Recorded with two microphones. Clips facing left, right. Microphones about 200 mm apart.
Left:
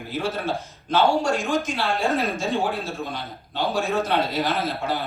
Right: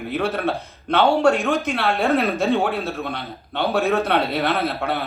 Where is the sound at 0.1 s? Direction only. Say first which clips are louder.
Right 3 dB; 65° right (ahead or behind).